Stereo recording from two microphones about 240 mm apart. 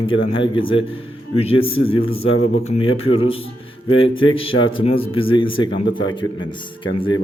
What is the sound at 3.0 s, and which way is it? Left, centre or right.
A man's voice, left.